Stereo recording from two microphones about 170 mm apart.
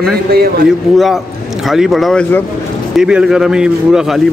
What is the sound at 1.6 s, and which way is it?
A man's voice, centre (ahead or behind).